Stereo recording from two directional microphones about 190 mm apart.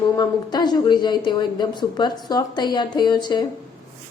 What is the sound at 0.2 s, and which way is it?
A woman's voice, 20° left (ahead or behind).